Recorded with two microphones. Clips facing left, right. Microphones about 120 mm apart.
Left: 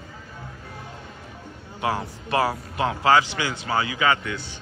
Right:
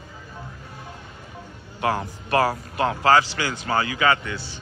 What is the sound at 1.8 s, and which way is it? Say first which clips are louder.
A man's voice: right 2 dB; 15° left (ahead or behind).